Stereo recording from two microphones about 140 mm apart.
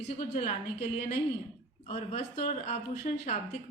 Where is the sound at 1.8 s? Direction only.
50° left (ahead or behind).